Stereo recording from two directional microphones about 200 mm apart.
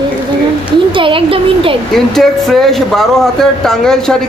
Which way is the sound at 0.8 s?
25° right (ahead or behind).